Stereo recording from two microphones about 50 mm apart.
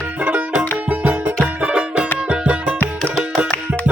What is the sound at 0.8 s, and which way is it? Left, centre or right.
Music, right.